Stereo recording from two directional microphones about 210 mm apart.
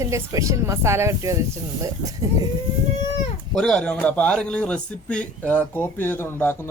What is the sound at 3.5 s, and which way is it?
A man's voice, centre (ahead or behind).